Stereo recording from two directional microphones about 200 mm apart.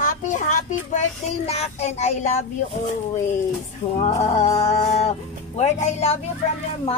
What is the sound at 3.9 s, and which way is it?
A child's voice, 30° left (ahead or behind).